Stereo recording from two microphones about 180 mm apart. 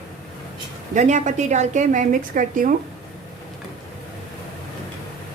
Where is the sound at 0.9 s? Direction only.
40° right (ahead or behind).